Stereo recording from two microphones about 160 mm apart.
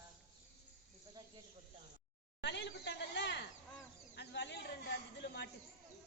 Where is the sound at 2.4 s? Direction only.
90° left.